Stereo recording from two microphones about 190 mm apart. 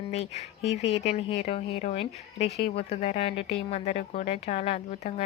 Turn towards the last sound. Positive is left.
turn(degrees=35)  # may be behind; listen again after turning